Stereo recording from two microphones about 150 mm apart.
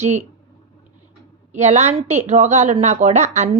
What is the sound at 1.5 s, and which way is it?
A woman's voice, 45° right (ahead or behind).